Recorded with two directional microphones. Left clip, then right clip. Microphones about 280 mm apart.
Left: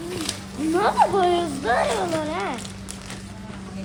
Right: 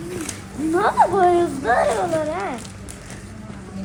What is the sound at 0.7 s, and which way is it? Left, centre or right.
Speech, centre.